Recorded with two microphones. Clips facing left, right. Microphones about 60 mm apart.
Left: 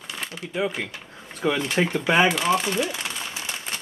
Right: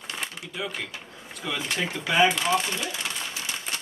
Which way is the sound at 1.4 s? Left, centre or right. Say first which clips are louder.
Left 8 dB; left.